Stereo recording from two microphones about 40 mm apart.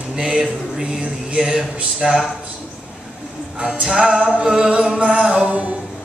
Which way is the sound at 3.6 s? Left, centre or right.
Right.